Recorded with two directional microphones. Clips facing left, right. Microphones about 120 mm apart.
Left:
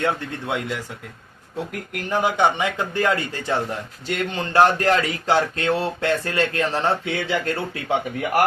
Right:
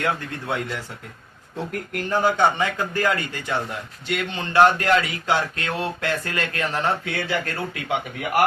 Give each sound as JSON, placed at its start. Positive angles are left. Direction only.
{"t": 1.5, "sound": "a man's voice", "side_deg": 10}
{"t": 4.1, "sound": "speech", "side_deg": 40}